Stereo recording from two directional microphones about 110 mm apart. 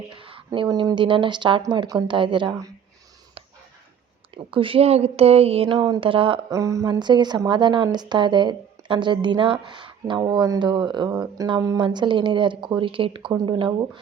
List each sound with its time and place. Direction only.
0.1 s a sound: 55° right (ahead or behind)
0.7 s speech: 40° right (ahead or behind)
4.5 s speech: 55° right (ahead or behind)
5.7 s speech: 40° right (ahead or behind)
6.5 s speech: 30° right (ahead or behind)
7.0 s speech: 40° right (ahead or behind)
11.4 s speech: 45° right (ahead or behind)
13.3 s speech: 40° right (ahead or behind)